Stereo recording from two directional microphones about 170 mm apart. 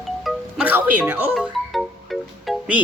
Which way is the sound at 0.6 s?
10° right (ahead or behind).